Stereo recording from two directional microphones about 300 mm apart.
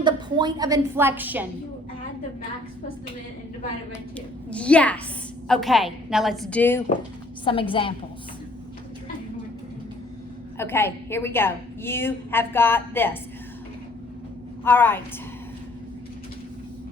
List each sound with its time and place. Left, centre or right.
0.0 s a woman's voice: centre
4.4 s a woman's voice: centre
7.4 s a woman's voice: centre
10.6 s a woman's voice: centre
14.6 s a woman's voice: centre